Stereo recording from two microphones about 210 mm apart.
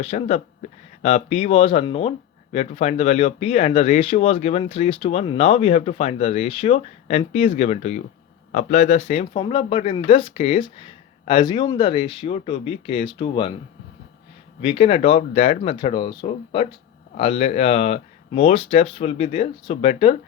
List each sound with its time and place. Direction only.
0.0 s speech: 30° left (ahead or behind)
14.6 s speech: 30° left (ahead or behind)